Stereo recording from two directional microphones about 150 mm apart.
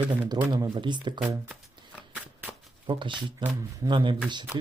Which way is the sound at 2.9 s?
30° right (ahead or behind).